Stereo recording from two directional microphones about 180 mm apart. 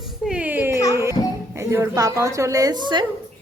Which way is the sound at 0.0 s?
5° right (ahead or behind).